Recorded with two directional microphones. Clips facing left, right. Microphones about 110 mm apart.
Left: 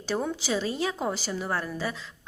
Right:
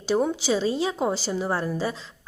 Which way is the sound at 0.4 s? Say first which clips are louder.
Right 4 dB; 25° right (ahead or behind).